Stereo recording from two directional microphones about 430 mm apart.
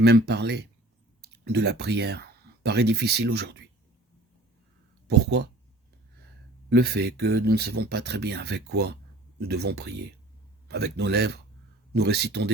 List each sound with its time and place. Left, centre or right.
0.0 s speech: right
5.0 s speech: right
6.7 s speech: right